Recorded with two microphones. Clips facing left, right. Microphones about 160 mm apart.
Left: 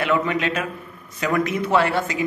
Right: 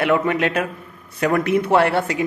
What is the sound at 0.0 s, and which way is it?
A man's voice, 55° right (ahead or behind).